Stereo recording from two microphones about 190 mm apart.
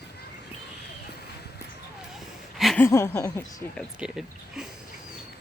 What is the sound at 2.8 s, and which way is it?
Speech, 15° left (ahead or behind).